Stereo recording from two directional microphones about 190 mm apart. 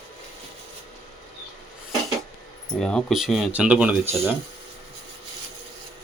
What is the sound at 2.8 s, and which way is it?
Speech, 5° left (ahead or behind).